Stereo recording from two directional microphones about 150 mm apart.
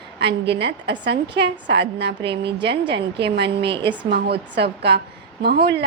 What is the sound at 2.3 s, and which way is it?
Speech, 35° right (ahead or behind).